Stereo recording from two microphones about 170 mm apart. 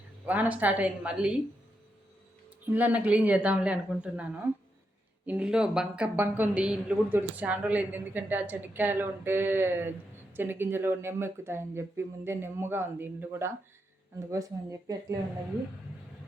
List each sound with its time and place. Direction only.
0.3 s speech: 10° right (ahead or behind)
2.6 s speech: 10° right (ahead or behind)